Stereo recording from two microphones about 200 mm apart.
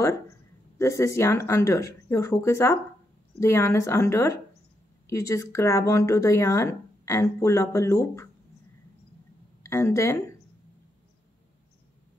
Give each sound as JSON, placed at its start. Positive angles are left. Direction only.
{"t": 0.7, "sound": "speech", "side_deg": 15}
{"t": 9.6, "sound": "a woman's voice", "side_deg": 15}